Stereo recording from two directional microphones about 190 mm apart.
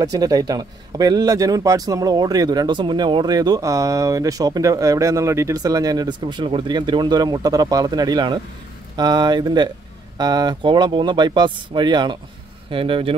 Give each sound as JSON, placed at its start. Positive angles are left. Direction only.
{"t": 0.0, "sound": "a man's voice", "side_deg": -20}